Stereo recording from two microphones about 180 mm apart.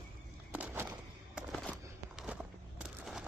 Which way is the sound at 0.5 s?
10° right (ahead or behind).